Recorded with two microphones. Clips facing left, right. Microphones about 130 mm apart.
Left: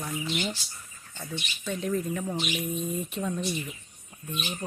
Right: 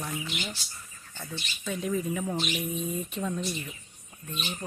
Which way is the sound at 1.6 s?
5° right (ahead or behind).